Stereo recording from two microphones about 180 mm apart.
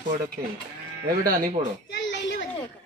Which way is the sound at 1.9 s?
75° left (ahead or behind).